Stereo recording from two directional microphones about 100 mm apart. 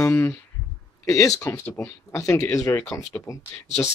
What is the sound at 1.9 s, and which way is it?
Speech, 30° left (ahead or behind).